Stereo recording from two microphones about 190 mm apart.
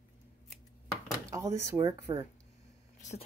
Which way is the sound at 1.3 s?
15° right (ahead or behind).